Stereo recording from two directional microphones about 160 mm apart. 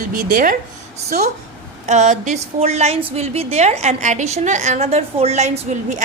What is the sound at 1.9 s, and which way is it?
A woman's voice, 45° right (ahead or behind).